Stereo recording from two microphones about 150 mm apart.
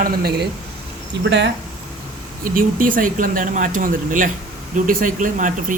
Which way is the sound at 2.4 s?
70° right (ahead or behind).